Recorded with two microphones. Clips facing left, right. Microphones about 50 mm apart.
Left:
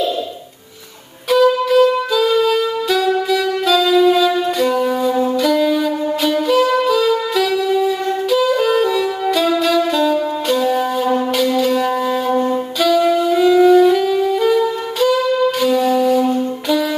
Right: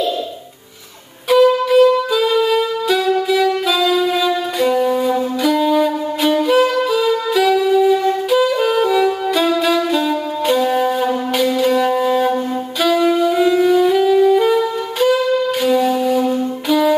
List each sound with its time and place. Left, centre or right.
1.3 s saxophone: centre
5.4 s music: centre
6.9 s wind instrument: centre
8.3 s saxophone: centre
11.3 s wind instrument: centre
13.8 s saxophone: centre
15.6 s wind instrument: centre